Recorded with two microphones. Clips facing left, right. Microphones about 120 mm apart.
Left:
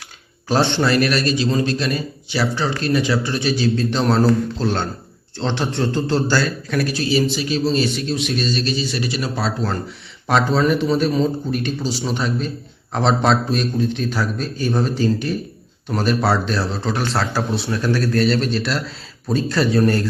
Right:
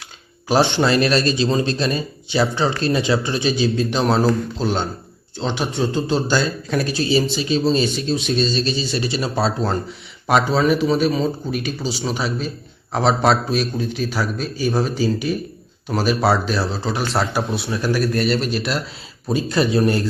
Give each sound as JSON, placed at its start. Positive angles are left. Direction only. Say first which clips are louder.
{"t": 0.4, "sound": "a man's voice", "louder": "right 1 dB", "side_deg": -10}
{"t": 0.9, "sound": "a man's voice", "louder": "right 1 dB", "side_deg": -25}
{"t": 4.0, "sound": "a man's voice", "louder": "left 2 dB", "side_deg": -5}
{"t": 4.6, "sound": "a man's voice", "louder": "even", "side_deg": -25}
{"t": 5.4, "sound": "a man's voice", "louder": "even", "side_deg": -5}
{"t": 5.9, "sound": "a man's voice", "louder": "left 2 dB", "side_deg": -15}
{"t": 10.2, "sound": "a man's voice", "louder": "even", "side_deg": -10}